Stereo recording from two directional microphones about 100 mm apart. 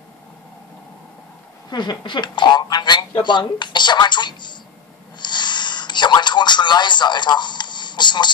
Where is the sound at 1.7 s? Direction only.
50° left (ahead or behind).